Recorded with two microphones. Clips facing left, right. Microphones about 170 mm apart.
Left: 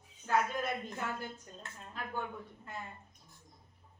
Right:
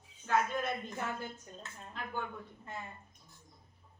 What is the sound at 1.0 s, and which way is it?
Speech, 20° right (ahead or behind).